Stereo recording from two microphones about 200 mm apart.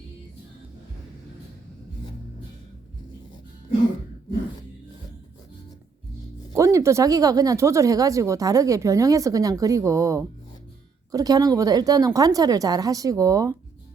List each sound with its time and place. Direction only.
6.5 s speech: 15° right (ahead or behind)